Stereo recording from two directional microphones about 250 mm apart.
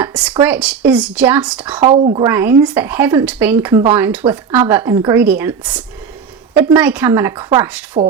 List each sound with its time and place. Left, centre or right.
0.0 s a sound: centre
0.4 s speech: centre
1.8 s speech: right
2.2 s speech: centre